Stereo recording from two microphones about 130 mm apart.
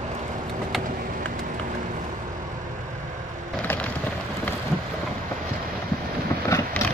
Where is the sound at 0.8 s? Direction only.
90° right.